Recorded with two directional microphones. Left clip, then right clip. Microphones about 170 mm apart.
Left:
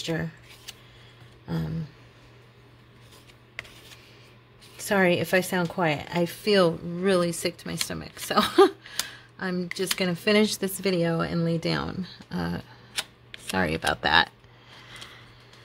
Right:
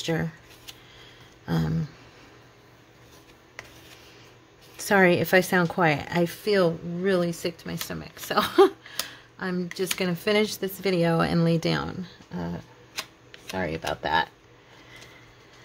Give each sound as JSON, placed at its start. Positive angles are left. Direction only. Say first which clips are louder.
{"t": 0.0, "sound": "a sound", "louder": "right 2 dB", "side_deg": -10}
{"t": 4.7, "sound": "speech", "louder": "right 3 dB", "side_deg": -10}
{"t": 6.4, "sound": "speech", "louder": "left 3 dB", "side_deg": 20}
{"t": 9.1, "sound": "a sound", "louder": "even", "side_deg": 10}
{"t": 9.9, "sound": "speech", "louder": "left 1 dB", "side_deg": 10}
{"t": 11.0, "sound": "speech", "louder": "right 3 dB", "side_deg": -10}
{"t": 11.7, "sound": "speech", "louder": "even", "side_deg": 10}